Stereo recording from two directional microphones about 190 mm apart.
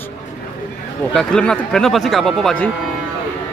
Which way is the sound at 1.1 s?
5° left (ahead or behind).